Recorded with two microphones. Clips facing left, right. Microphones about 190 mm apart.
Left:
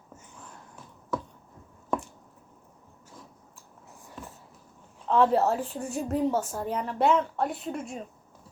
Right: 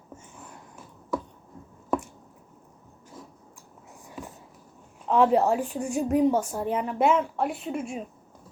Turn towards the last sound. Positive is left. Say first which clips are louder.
# right 3 dB
turn(degrees=-5)  # may be behind; listen again after turning